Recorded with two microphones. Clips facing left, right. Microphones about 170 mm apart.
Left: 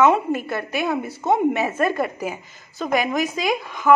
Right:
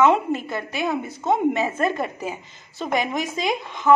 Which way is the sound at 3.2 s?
25° right (ahead or behind).